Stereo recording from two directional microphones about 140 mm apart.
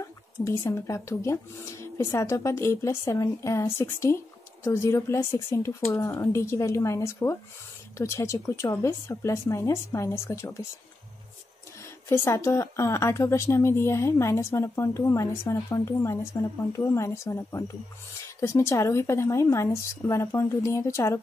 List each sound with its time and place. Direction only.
0.4 s a woman's voice: 20° left (ahead or behind)
12.1 s a woman's voice: 20° left (ahead or behind)